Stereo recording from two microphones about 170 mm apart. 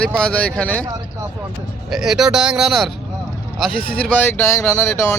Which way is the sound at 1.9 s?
Centre (ahead or behind).